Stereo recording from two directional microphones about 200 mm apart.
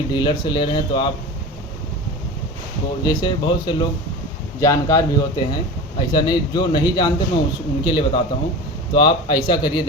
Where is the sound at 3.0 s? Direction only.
20° left (ahead or behind).